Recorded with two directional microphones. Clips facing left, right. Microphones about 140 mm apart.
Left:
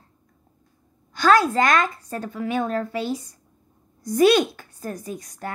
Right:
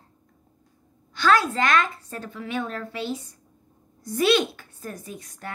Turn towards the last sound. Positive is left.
turn(degrees=40)  # may be behind; listen again after turning